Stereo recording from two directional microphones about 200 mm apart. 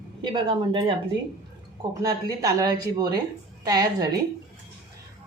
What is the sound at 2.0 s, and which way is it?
Speech, 15° right (ahead or behind).